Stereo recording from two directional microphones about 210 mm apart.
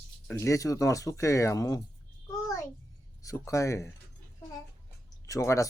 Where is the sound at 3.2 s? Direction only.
15° left (ahead or behind).